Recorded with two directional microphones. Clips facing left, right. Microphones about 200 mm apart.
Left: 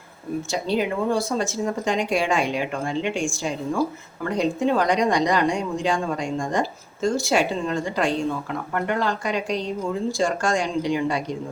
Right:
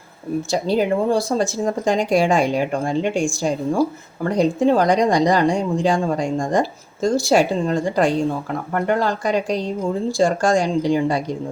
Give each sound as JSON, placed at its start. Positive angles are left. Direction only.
{"t": 0.5, "sound": "speech", "side_deg": -40}